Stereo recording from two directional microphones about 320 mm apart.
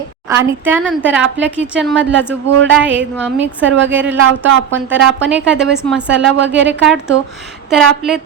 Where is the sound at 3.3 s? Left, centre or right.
Right.